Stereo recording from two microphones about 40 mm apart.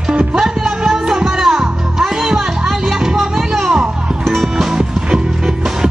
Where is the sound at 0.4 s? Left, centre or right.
Centre.